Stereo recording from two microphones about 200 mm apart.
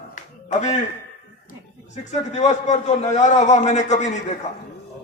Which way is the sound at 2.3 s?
35° left (ahead or behind).